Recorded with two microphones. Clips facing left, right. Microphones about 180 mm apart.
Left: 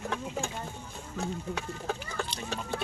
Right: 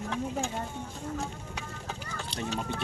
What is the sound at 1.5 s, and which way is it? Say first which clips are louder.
Speech: left 5 dB; 55° left (ahead or behind).